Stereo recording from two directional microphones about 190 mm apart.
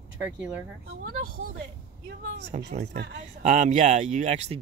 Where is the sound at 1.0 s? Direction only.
50° right (ahead or behind).